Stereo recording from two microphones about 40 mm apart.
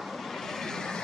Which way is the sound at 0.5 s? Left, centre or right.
Centre.